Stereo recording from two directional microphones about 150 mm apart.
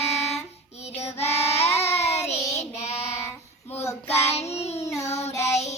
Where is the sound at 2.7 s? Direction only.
45° left (ahead or behind).